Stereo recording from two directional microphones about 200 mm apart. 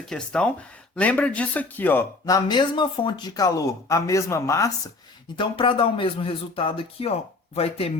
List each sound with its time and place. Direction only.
0.1 s speech: 5° left (ahead or behind)
5.4 s speech: 25° left (ahead or behind)